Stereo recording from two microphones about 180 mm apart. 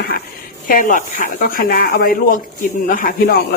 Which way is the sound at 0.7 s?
50° left (ahead or behind).